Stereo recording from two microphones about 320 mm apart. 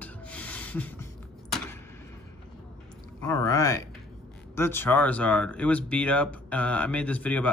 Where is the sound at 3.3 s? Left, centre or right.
Centre.